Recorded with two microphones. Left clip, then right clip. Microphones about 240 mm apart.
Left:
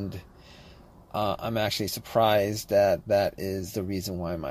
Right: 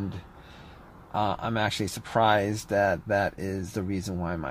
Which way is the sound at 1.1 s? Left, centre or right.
Centre.